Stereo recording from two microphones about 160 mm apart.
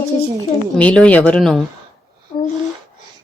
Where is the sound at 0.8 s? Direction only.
10° left (ahead or behind).